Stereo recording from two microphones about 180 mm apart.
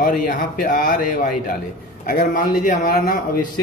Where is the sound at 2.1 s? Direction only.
50° left (ahead or behind).